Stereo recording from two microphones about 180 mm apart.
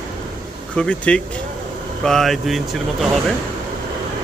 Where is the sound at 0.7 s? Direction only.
5° left (ahead or behind).